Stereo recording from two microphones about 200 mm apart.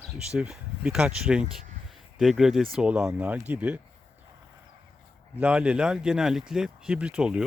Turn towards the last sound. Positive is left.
turn(degrees=-5)  # may be behind; listen again after turning